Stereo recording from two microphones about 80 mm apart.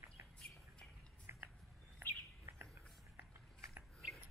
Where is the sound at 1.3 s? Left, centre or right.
Right.